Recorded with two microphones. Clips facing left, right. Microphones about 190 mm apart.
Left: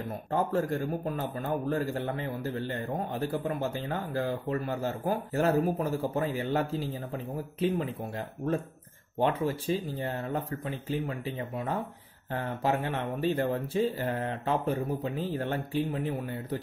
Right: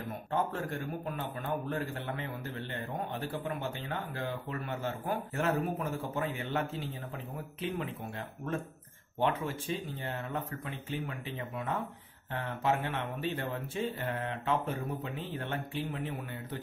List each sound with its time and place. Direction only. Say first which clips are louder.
0.3 s a man's voice: left 6 dB; 40° left (ahead or behind)
9.2 s a man's voice: left 4 dB; 35° left (ahead or behind)